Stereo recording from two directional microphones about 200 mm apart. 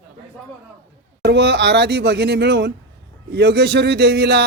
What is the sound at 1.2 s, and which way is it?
A man's voice, 55° right (ahead or behind).